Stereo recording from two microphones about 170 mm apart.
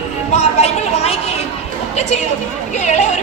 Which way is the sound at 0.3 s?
40° left (ahead or behind).